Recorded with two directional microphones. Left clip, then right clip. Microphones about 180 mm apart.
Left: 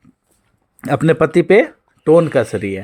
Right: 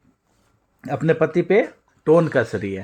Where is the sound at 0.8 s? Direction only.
30° left (ahead or behind).